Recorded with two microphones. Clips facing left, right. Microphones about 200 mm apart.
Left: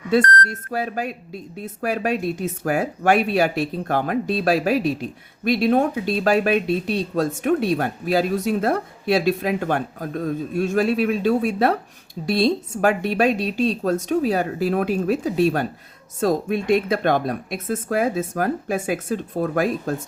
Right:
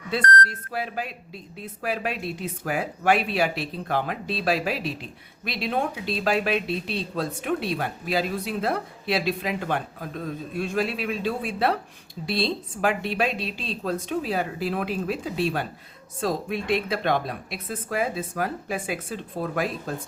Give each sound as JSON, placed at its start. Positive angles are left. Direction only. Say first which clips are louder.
{"t": 0.1, "sound": "speech", "louder": "left 6 dB", "side_deg": 45}